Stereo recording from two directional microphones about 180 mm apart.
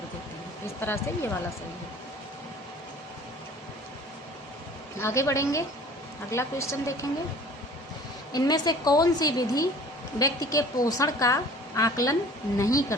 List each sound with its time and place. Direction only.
0.8 s a woman's voice: 10° left (ahead or behind)
4.9 s a woman's voice: 15° left (ahead or behind)
8.3 s a woman's voice: 20° left (ahead or behind)